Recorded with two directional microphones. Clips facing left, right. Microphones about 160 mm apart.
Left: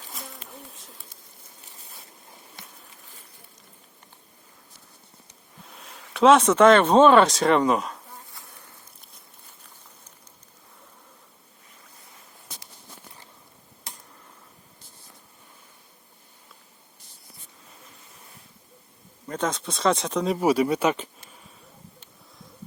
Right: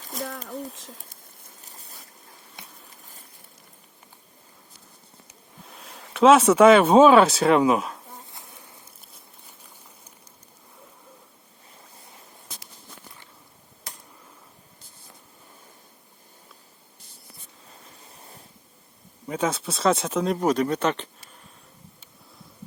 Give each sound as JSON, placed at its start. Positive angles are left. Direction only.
{"t": 0.4, "sound": "a sound", "side_deg": -90}
{"t": 5.3, "sound": "speech", "side_deg": 0}
{"t": 8.4, "sound": "insect", "side_deg": -20}
{"t": 19.3, "sound": "speech", "side_deg": -5}